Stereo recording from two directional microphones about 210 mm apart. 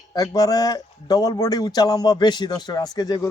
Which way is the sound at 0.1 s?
20° left (ahead or behind).